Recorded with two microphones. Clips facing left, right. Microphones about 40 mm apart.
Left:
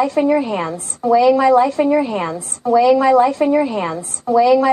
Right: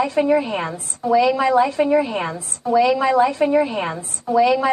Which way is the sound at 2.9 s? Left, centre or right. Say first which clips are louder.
Left 4 dB; right.